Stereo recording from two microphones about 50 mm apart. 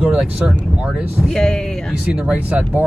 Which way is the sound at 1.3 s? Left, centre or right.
Centre.